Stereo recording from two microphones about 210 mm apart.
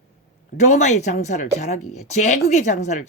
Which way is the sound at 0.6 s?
35° left (ahead or behind).